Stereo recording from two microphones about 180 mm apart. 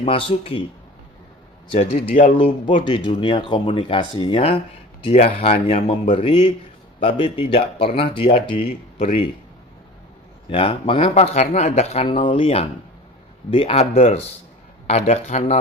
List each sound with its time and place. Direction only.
0.3 s speech: 30° left (ahead or behind)
1.8 s speech: 40° left (ahead or behind)
2.4 s speech: 30° left (ahead or behind)
10.5 s speech: 30° left (ahead or behind)